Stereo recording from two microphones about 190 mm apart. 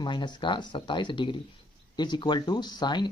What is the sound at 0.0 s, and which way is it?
Speech, 25° left (ahead or behind).